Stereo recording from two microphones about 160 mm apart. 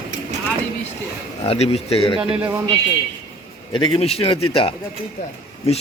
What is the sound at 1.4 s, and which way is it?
Speech, 40° left (ahead or behind).